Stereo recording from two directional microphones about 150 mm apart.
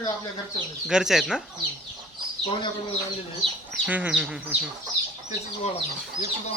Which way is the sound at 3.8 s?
10° right (ahead or behind).